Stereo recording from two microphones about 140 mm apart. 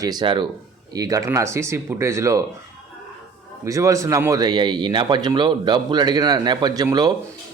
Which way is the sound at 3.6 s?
25° right (ahead or behind).